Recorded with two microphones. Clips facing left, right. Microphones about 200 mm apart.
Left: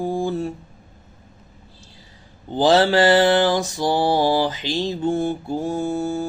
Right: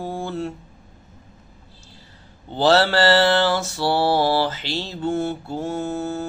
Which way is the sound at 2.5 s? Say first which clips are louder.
Left 2 dB; 15° left (ahead or behind).